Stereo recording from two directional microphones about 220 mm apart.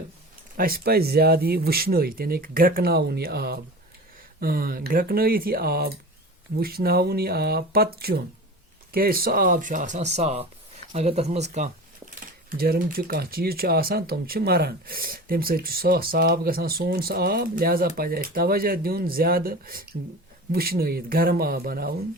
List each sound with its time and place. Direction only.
0.5 s speech: 40° right (ahead or behind)
12.5 s speech: 45° right (ahead or behind)